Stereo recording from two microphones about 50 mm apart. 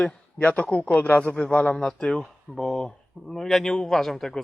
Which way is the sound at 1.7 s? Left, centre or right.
Centre.